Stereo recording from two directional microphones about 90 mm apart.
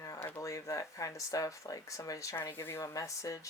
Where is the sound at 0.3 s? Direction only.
35° left (ahead or behind).